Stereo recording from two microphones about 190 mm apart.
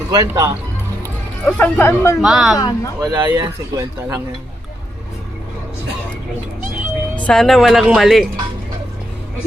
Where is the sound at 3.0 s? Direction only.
20° right (ahead or behind).